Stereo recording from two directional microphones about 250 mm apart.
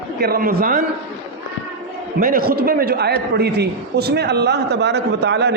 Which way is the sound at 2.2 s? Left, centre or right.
Right.